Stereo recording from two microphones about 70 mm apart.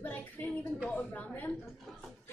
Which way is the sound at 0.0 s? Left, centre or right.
Left.